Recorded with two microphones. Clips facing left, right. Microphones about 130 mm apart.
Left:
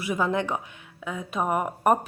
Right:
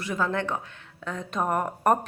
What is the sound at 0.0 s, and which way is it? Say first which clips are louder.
Speech: left 2 dB; 15° left (ahead or behind).